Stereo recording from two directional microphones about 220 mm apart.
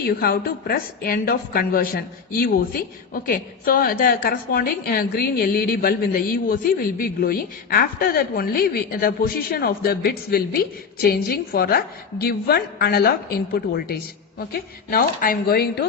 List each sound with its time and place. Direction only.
0.0 s a woman's voice: 45° left (ahead or behind)